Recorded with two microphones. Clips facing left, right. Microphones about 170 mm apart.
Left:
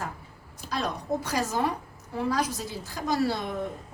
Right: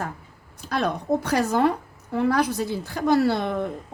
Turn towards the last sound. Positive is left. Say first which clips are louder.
# right 7 dB
turn(degrees=-60)  # may be behind; listen again after turning